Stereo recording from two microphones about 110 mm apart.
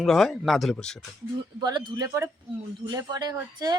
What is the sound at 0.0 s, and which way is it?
Speech, centre (ahead or behind).